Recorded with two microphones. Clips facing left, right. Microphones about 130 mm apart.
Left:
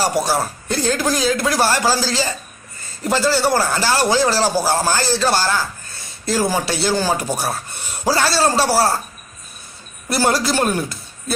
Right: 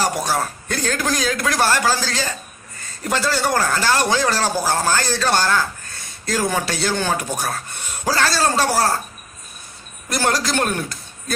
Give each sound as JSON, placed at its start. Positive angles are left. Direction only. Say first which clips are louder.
{"t": 0.0, "sound": "speech", "louder": "left 2 dB", "side_deg": 10}
{"t": 10.1, "sound": "a man's voice", "louder": "left 3 dB", "side_deg": 5}